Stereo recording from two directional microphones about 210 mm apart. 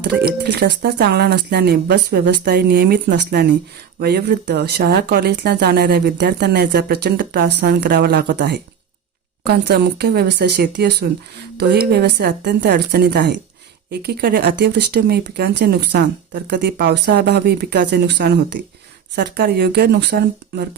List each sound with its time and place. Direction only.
0.0 s speech: 50° right (ahead or behind)